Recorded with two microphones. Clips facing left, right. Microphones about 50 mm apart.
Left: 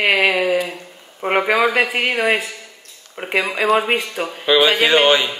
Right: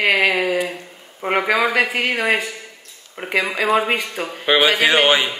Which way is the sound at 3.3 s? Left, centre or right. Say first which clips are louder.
Left 1 dB; left.